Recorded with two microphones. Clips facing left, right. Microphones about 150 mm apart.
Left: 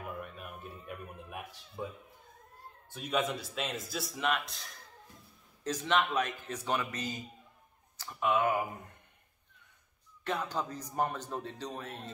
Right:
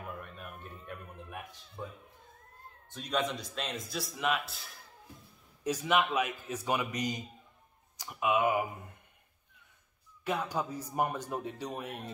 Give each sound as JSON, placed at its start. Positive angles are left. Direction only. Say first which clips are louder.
{"t": 0.2, "sound": "a sound", "louder": "left 2 dB", "side_deg": 5}
{"t": 2.9, "sound": "speech", "louder": "left 1 dB", "side_deg": 5}
{"t": 10.2, "sound": "speech", "louder": "right 1 dB", "side_deg": -10}